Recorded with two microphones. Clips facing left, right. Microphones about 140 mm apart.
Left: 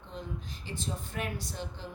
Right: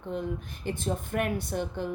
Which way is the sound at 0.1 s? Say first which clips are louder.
Right 8 dB; 55° right (ahead or behind).